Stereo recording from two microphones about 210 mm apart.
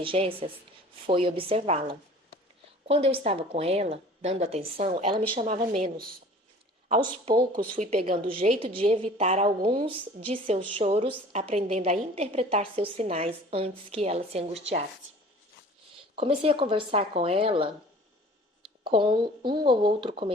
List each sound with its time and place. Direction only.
0.0 s a woman's voice: 25° right (ahead or behind)
7.0 s a woman's voice: 20° right (ahead or behind)
16.1 s a woman's voice: 25° right (ahead or behind)
18.9 s a woman's voice: 25° right (ahead or behind)